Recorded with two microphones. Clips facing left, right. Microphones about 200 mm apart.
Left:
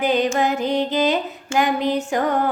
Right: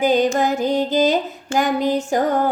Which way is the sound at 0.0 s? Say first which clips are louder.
Right 2 dB; 45° right (ahead or behind).